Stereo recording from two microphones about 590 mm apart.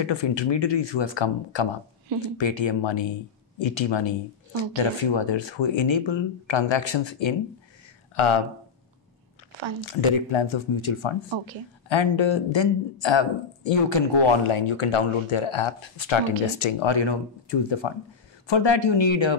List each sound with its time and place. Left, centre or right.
0.0 s speech: left
9.8 s speech: left